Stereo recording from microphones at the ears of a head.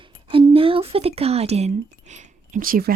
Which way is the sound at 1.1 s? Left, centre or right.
Right.